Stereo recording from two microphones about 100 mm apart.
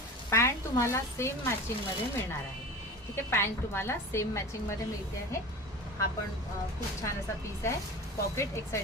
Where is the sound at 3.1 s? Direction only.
25° left (ahead or behind).